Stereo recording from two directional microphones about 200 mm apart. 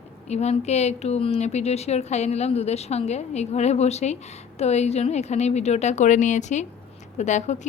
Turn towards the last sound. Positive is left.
turn(degrees=35)  # may be behind; listen again after turning